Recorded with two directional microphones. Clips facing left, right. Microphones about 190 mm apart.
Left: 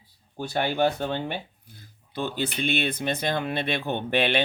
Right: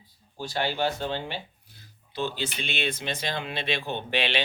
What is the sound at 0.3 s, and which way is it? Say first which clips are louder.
Speech: left 3 dB; 55° left (ahead or behind).